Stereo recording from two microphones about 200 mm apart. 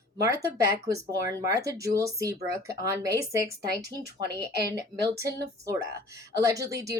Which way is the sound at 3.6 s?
55° right (ahead or behind).